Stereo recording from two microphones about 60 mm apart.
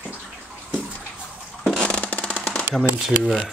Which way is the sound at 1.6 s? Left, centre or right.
Centre.